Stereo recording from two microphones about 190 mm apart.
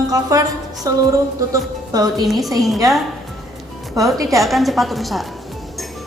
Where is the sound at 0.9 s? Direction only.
20° right (ahead or behind).